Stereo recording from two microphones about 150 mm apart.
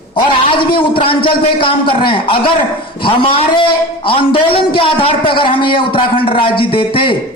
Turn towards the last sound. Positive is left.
turn(degrees=35)  # may be behind; listen again after turning